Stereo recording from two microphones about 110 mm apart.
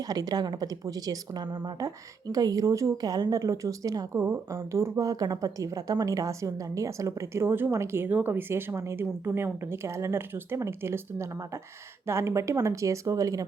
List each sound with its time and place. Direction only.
0.0 s speech: 35° right (ahead or behind)
4.1 s a woman's voice: 25° right (ahead or behind)